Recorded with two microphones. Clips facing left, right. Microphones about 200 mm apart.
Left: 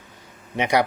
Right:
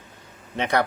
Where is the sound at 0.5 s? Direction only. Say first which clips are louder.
Left 2 dB; 15° left (ahead or behind).